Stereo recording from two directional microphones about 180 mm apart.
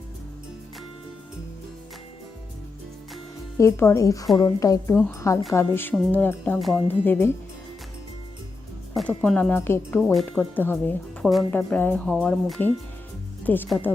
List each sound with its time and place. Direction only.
3.6 s speech: 15° left (ahead or behind)
6.8 s speech: 10° left (ahead or behind)
9.0 s speech: 5° left (ahead or behind)